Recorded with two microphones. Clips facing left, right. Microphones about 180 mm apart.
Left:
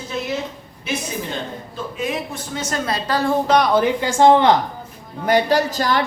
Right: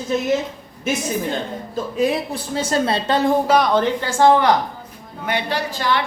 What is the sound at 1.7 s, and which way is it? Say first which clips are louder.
A woman's voice: right 6 dB; 35° right (ahead or behind).